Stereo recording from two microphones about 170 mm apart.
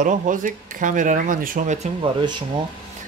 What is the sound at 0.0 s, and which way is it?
Speech, 50° right (ahead or behind).